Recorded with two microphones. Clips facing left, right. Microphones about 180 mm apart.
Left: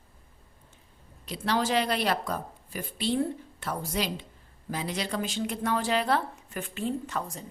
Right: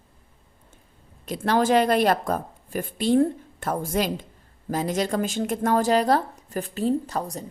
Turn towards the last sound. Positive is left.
turn(degrees=-40)  # may be behind; listen again after turning